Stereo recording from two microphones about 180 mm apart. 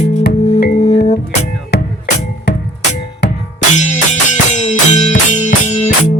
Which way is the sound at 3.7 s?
40° left (ahead or behind).